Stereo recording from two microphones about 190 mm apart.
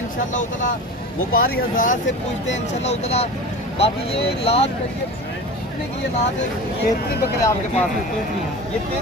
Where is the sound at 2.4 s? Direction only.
35° left (ahead or behind).